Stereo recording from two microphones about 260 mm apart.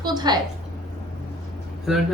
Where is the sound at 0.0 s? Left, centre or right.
Centre.